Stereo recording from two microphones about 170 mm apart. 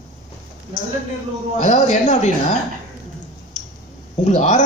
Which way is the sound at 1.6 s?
45° left (ahead or behind).